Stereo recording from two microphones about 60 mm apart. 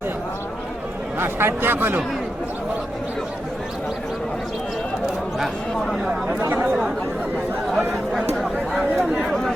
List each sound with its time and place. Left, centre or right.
1.2 s speech: right
6.5 s chatter: right
7.8 s chatter: centre